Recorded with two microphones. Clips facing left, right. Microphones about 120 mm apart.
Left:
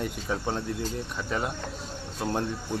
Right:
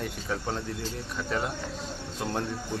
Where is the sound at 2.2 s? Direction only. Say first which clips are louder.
Left 2 dB; 10° left (ahead or behind).